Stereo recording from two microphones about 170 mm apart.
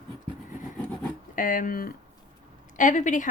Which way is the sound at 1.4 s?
55° left (ahead or behind).